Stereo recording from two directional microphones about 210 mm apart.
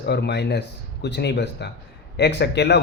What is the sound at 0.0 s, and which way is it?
Speech, 55° left (ahead or behind).